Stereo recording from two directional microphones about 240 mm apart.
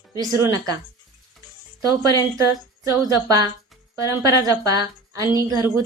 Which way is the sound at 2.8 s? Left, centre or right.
Centre.